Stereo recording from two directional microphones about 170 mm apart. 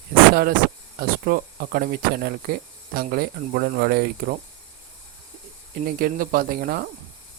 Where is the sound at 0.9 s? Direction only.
60° right (ahead or behind).